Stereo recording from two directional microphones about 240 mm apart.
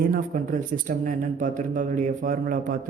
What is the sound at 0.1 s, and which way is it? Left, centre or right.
A woman's voice, right.